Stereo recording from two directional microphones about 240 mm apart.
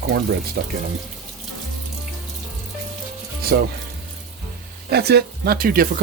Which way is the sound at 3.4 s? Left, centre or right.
Right.